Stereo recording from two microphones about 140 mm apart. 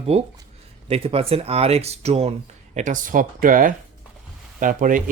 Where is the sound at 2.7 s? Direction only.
65° right (ahead or behind).